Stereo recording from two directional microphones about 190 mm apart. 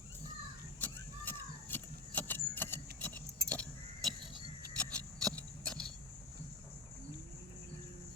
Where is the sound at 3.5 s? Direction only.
5° left (ahead or behind).